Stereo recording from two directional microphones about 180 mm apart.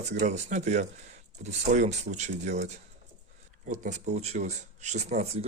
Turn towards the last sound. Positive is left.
turn(degrees=-40)  # may be behind; listen again after turning